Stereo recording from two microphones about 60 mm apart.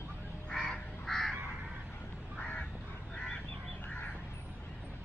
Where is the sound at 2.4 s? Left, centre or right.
Centre.